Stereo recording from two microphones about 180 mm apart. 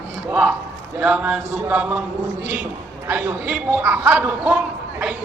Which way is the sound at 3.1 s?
5° right (ahead or behind).